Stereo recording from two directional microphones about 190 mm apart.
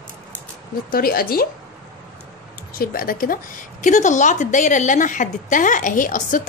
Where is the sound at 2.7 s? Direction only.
50° left (ahead or behind).